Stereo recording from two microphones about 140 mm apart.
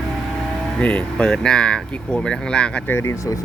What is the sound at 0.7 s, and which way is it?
Speech, 10° left (ahead or behind).